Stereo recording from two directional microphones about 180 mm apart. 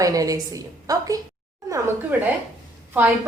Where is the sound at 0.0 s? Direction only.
20° right (ahead or behind).